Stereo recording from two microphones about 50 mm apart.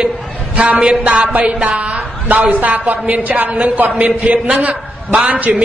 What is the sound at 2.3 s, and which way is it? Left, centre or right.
A woman's voice, right.